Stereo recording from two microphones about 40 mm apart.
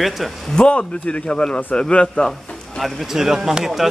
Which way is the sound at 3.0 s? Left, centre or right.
Centre.